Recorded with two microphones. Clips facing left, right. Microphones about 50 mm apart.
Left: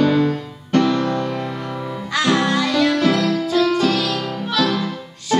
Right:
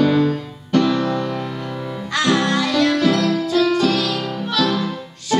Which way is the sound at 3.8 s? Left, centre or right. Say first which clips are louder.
Even; centre.